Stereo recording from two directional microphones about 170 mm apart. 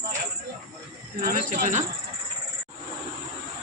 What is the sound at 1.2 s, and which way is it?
Speech, 55° right (ahead or behind).